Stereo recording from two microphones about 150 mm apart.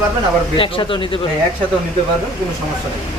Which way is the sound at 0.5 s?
35° left (ahead or behind).